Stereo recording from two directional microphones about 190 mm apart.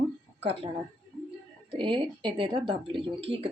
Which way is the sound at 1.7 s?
25° right (ahead or behind).